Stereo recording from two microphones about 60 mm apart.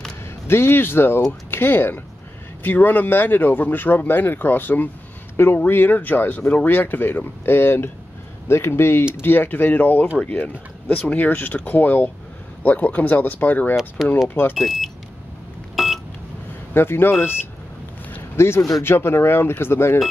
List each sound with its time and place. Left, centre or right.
0.5 s speech: left
14.0 s speech: centre
15.7 s beep: centre
16.7 s speech: left